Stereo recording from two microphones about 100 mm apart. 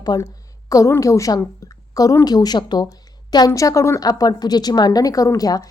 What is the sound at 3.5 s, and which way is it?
A woman's voice, 30° left (ahead or behind).